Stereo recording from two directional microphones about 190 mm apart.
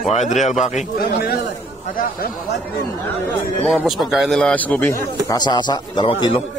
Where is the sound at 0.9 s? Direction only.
55° left (ahead or behind).